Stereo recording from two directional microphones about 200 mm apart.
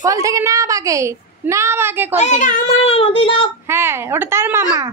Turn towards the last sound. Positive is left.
turn(degrees=-15)  # may be behind; listen again after turning